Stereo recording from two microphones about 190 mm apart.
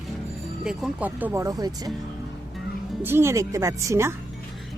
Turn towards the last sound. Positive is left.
turn(degrees=-15)  # may be behind; listen again after turning